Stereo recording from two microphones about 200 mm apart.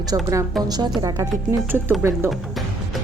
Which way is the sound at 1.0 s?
20° right (ahead or behind).